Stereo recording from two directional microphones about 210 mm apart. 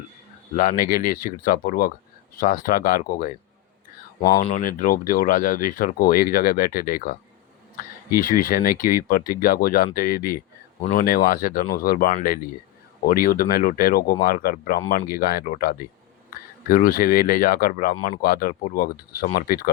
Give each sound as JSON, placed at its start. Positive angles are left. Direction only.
{"t": 0.5, "sound": "speech", "side_deg": 40}
{"t": 4.4, "sound": "speech", "side_deg": 40}